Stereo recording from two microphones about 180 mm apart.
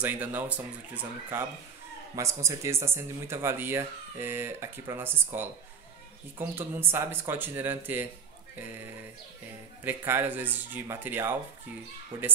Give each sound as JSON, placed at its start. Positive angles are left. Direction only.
{"t": 0.0, "sound": "speech", "side_deg": -10}
{"t": 2.1, "sound": "speech", "side_deg": -15}
{"t": 9.8, "sound": "speech", "side_deg": -10}